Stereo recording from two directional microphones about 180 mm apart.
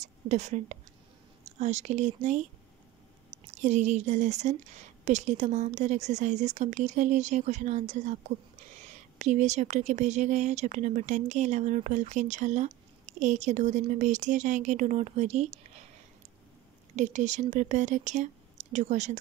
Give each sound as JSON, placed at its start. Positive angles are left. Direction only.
{"t": 0.0, "sound": "a woman's voice", "side_deg": -40}
{"t": 16.9, "sound": "speech", "side_deg": -40}